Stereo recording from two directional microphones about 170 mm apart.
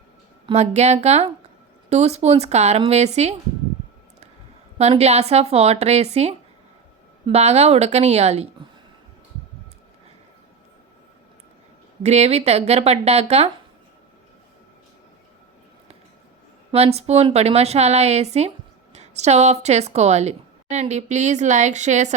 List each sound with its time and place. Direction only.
0.4 s a woman's voice: 40° right (ahead or behind)
4.8 s a woman's voice: 40° right (ahead or behind)
12.0 s a woman's voice: 40° right (ahead or behind)
16.7 s a woman's voice: 35° right (ahead or behind)